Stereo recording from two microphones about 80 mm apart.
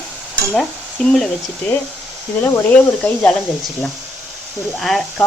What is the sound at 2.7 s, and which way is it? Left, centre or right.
Speech, centre.